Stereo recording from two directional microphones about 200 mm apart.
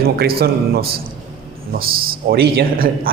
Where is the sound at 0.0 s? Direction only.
50° right (ahead or behind).